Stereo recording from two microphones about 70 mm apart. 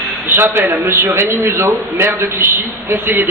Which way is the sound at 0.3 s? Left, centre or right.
Right.